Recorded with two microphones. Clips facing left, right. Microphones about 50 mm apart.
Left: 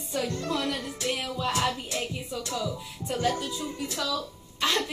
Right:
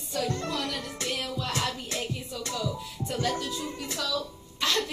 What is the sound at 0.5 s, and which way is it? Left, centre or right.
Music, centre.